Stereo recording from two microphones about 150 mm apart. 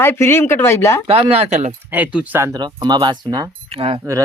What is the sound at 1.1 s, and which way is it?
Speech, 40° right (ahead or behind).